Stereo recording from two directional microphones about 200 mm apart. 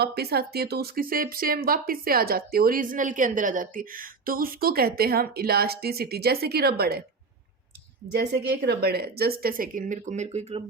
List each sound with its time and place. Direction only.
0.0 s speech: 50° right (ahead or behind)
8.2 s speech: 55° right (ahead or behind); by 10.6 s 35° right (ahead or behind)